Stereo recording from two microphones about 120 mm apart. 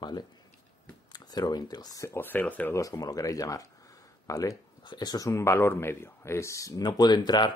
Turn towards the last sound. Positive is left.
turn(degrees=35)  # may be behind; listen again after turning